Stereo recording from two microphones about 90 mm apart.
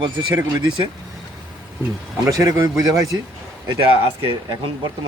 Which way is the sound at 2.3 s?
40° right (ahead or behind).